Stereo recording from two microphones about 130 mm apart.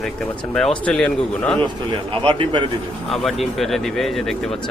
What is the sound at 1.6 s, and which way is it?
A man's voice, 35° right (ahead or behind).